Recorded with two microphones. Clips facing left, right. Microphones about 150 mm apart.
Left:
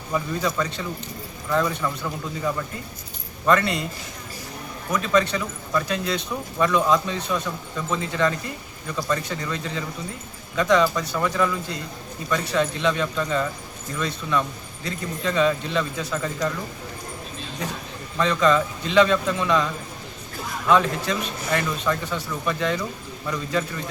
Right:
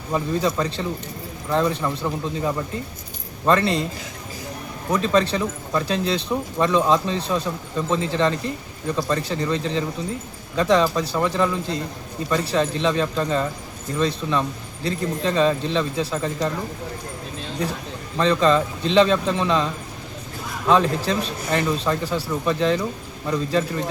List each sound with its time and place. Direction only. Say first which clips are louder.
0.1 s speech: right 3 dB; 30° right (ahead or behind)
3.4 s speech: right 2 dB; 30° right (ahead or behind)
4.9 s speech: right 2 dB; 30° right (ahead or behind)
18.2 s speech: right 2 dB; 30° right (ahead or behind)
20.7 s speech: right 2 dB; 35° right (ahead or behind)